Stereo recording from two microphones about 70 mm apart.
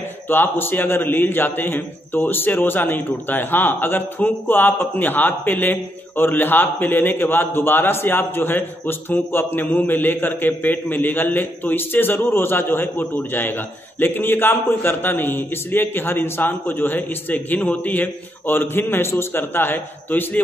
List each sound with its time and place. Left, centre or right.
0.3 s a man's voice: left